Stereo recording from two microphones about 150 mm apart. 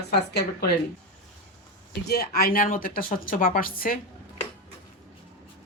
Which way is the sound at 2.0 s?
90° left.